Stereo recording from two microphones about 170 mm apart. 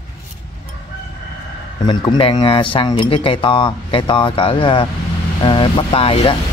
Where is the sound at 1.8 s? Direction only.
25° left (ahead or behind).